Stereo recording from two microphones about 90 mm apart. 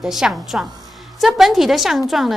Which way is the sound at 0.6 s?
50° right (ahead or behind).